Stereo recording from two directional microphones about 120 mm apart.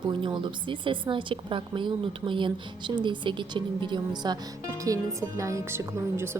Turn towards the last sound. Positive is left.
turn(degrees=-20)  # may be behind; listen again after turning